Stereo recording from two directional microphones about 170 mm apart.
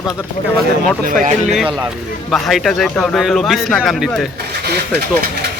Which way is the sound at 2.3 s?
Centre (ahead or behind).